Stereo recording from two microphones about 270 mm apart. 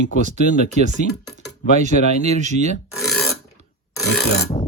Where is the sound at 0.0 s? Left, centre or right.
Right.